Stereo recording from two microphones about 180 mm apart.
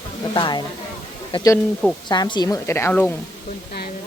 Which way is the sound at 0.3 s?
25° left (ahead or behind).